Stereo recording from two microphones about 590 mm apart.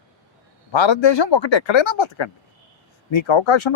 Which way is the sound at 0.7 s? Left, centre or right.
Left.